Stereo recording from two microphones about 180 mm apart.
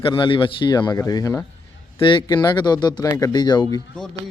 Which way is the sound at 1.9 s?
30° left (ahead or behind).